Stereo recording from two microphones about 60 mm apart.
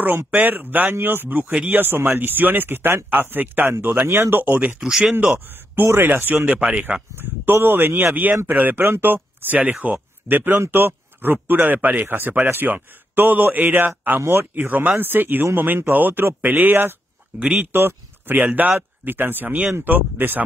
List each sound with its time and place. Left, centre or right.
0.0 s speech: right
4.1 s speech: right
4.6 s speech: centre
6.0 s speech: right
7.2 s speech: right
9.6 s speech: right
9.9 s speech: right
17.4 s speech: right
17.7 s speech: right
18.3 s speech: right